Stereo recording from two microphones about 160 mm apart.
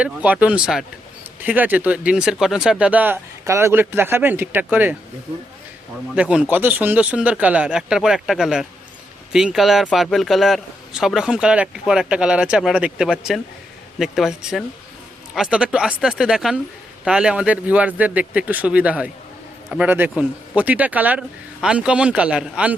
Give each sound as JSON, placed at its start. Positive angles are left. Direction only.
{"t": 0.0, "sound": "speech", "side_deg": -10}
{"t": 6.1, "sound": "a man's voice", "side_deg": -5}